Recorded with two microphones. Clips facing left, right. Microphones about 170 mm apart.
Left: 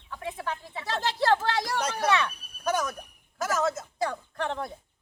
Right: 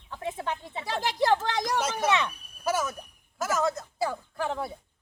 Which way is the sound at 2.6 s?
5° right (ahead or behind).